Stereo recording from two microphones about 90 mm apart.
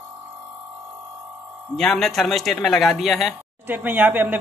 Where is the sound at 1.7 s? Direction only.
5° left (ahead or behind).